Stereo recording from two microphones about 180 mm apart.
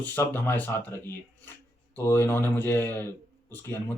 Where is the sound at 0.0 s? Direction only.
10° left (ahead or behind).